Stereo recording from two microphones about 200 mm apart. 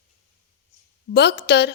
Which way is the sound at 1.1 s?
55° left (ahead or behind).